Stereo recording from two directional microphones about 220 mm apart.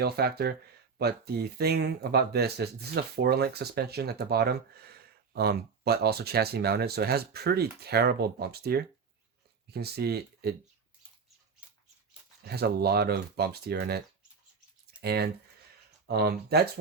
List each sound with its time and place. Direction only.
0.0 s speech: 45° right (ahead or behind)
12.5 s speech: 45° right (ahead or behind)
15.0 s speech: 45° right (ahead or behind)